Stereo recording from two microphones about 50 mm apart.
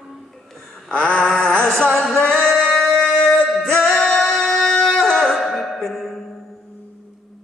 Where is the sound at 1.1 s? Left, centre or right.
Centre.